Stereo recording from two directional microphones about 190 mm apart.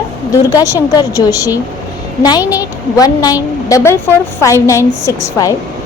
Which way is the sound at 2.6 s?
20° left (ahead or behind).